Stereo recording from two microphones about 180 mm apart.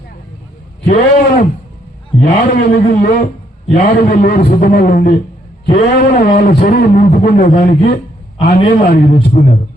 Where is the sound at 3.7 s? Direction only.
50° left (ahead or behind).